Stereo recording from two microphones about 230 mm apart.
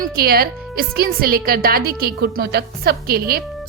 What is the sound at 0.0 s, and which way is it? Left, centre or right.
A woman's voice, right.